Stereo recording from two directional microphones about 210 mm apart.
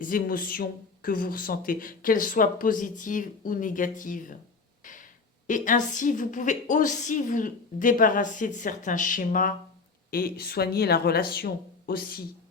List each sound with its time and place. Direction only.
0.0 s speech: 40° left (ahead or behind)
4.8 s a sound: 40° left (ahead or behind)
5.5 s speech: 40° left (ahead or behind)